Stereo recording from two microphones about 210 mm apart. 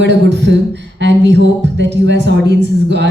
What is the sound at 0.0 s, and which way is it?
A woman's voice, 55° right (ahead or behind).